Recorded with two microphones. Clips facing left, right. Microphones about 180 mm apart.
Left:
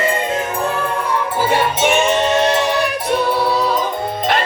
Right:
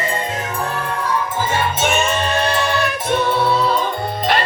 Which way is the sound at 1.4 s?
15° left (ahead or behind).